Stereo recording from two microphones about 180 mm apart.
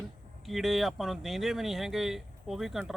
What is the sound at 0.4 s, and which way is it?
Speech, centre (ahead or behind).